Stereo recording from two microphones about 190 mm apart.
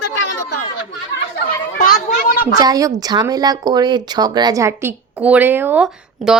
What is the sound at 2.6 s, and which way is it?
Speech, 20° right (ahead or behind).